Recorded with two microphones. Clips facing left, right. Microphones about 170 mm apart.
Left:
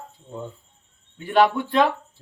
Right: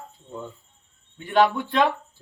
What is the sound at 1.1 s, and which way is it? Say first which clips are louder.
Speech: left 1 dB; 5° left (ahead or behind).